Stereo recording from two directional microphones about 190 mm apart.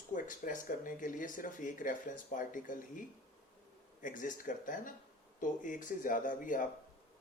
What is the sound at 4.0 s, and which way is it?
Speech, 45° left (ahead or behind).